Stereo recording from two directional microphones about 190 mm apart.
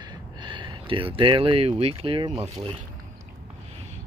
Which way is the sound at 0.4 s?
25° right (ahead or behind).